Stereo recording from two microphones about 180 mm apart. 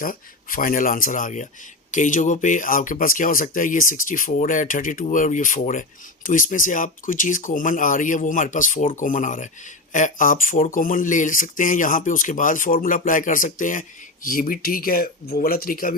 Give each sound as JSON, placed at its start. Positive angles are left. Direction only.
{"t": 0.0, "sound": "speech", "side_deg": 50}